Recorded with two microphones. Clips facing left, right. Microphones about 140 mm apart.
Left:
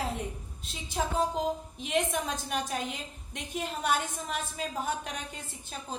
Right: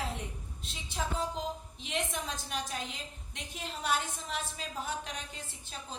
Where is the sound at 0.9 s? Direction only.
45° left (ahead or behind).